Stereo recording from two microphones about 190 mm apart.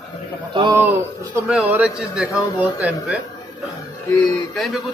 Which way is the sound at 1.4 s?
5° right (ahead or behind).